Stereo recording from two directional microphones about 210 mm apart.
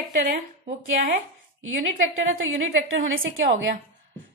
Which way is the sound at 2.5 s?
70° right (ahead or behind).